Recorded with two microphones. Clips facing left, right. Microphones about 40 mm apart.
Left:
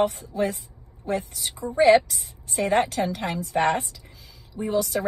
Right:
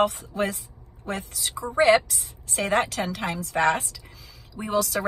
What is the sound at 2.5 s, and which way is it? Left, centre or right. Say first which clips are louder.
Speech: left 2 dB; right.